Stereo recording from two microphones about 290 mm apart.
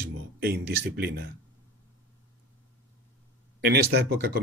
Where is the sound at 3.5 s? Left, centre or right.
Right.